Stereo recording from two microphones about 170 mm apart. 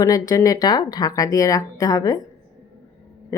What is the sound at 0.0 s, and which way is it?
Speech, 20° left (ahead or behind).